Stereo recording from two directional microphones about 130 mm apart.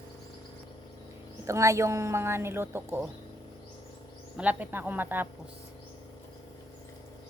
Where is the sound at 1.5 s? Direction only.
25° right (ahead or behind).